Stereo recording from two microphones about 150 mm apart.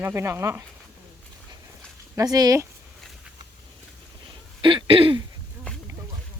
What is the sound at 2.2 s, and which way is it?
Speech, 25° right (ahead or behind).